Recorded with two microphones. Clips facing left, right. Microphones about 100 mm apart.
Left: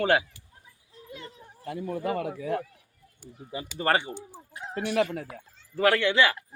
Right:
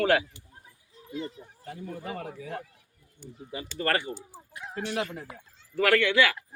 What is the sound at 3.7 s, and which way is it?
Speech, 25° left (ahead or behind).